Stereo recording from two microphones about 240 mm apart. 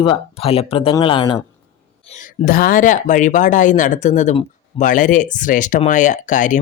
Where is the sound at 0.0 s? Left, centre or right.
Left.